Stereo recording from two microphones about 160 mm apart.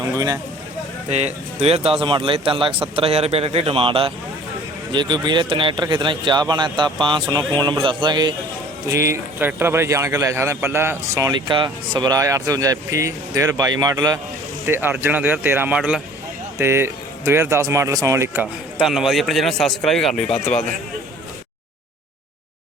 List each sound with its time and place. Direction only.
0.1 s a man's voice: 25° right (ahead or behind)
1.1 s a man's voice: 45° right (ahead or behind); by 8.3 s 30° right (ahead or behind)
8.9 s a man's voice: 20° right (ahead or behind)
14.7 s speech: 15° right (ahead or behind)
18.8 s speech: centre (ahead or behind)